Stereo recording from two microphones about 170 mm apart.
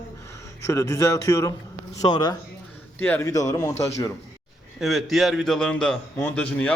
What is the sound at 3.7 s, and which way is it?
Speech, 40° left (ahead or behind).